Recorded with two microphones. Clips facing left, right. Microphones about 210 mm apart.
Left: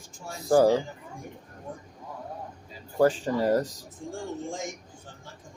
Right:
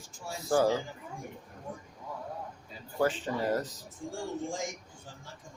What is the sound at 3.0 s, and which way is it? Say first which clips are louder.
Speech: left 6 dB; 40° left (ahead or behind).